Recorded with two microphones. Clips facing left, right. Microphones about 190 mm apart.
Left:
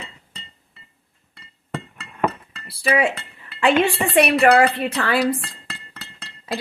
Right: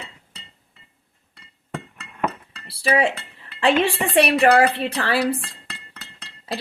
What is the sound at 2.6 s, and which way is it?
Speech, 30° right (ahead or behind).